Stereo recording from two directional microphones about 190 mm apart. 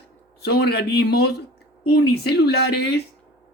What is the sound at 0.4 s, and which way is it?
Speech, 55° left (ahead or behind).